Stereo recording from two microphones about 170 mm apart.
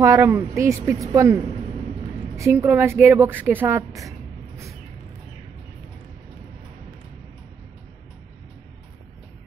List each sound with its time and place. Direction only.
0.0 s a woman's voice: 15° right (ahead or behind)